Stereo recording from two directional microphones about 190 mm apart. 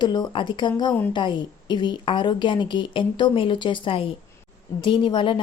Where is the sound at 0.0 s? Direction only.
20° left (ahead or behind).